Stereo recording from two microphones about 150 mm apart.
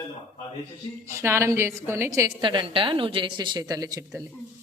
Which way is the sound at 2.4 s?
35° right (ahead or behind).